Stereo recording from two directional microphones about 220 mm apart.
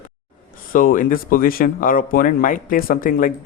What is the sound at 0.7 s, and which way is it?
Speech, 40° left (ahead or behind).